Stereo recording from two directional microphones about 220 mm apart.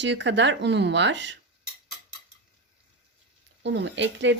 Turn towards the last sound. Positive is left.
turn(degrees=-55)  # may be behind; listen again after turning